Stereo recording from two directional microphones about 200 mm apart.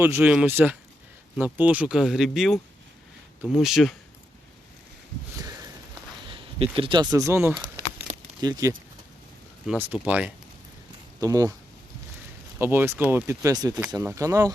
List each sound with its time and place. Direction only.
0.0 s speech: 10° right (ahead or behind)
5.4 s a sound: 20° right (ahead or behind)
8.1 s a sound: 5° right (ahead or behind)
8.4 s speech: 20° right (ahead or behind)
9.6 s speech: 5° right (ahead or behind)
12.5 s speech: 10° right (ahead or behind)